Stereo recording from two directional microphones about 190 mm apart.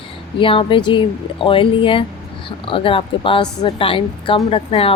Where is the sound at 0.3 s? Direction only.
25° left (ahead or behind).